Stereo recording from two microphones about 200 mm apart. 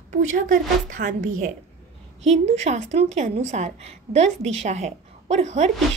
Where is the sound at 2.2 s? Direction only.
35° right (ahead or behind).